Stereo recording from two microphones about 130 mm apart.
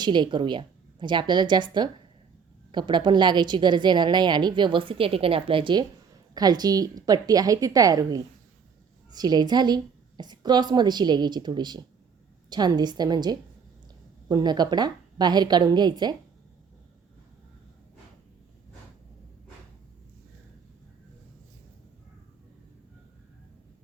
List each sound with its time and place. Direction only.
0.0 s a woman's voice: 35° right (ahead or behind)